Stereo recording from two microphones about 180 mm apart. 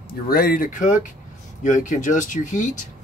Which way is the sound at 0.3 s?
55° left (ahead or behind).